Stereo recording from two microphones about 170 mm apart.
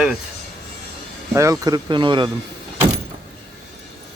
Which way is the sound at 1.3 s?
15° right (ahead or behind).